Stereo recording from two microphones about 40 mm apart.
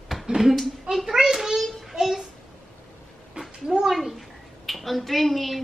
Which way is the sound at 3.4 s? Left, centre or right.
Right.